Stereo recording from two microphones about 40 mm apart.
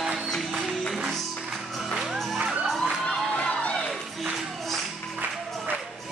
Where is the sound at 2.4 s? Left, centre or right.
Right.